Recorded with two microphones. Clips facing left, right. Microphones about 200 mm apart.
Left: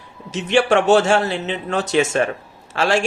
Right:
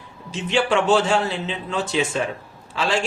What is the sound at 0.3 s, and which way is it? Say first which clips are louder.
Speech: left 4 dB; 75° left (ahead or behind).